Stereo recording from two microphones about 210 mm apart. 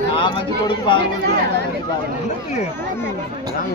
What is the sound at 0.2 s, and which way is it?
Speech, 25° left (ahead or behind).